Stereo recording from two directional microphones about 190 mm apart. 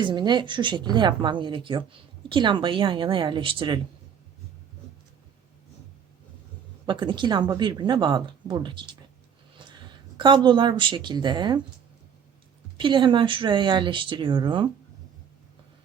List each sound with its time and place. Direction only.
0.0 s speech: 25° right (ahead or behind)
6.8 s speech: 25° right (ahead or behind)
10.2 s speech: 25° right (ahead or behind)
12.7 s speech: 25° right (ahead or behind)